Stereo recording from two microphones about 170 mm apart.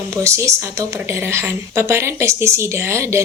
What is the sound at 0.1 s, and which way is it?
Speech, 15° right (ahead or behind).